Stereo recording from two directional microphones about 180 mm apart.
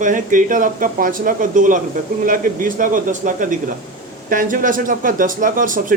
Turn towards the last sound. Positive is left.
turn(degrees=-50)  # may be behind; listen again after turning